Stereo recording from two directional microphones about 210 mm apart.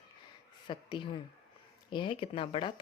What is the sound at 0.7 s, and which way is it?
Speech, 20° left (ahead or behind).